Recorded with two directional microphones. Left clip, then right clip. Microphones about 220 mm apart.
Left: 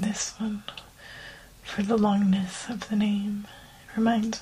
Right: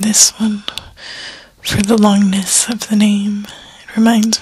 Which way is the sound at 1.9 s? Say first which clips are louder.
Right 11 dB; 50° right (ahead or behind).